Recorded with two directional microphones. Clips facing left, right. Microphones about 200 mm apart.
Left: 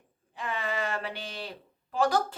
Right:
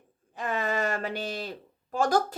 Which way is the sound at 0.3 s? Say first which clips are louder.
Right 4 dB; 45° right (ahead or behind).